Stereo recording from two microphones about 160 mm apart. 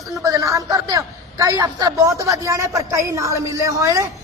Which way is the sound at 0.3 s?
20° right (ahead or behind).